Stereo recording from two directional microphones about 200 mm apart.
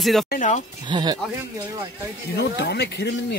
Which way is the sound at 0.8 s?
20° right (ahead or behind).